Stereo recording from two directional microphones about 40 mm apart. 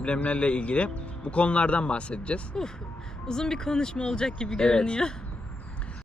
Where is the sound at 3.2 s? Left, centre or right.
Centre.